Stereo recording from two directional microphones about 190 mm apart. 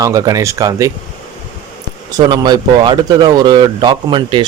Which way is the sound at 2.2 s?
20° right (ahead or behind).